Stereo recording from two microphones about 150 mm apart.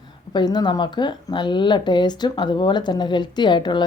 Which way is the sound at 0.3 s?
30° left (ahead or behind).